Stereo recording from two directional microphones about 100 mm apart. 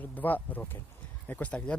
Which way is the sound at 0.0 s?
20° left (ahead or behind).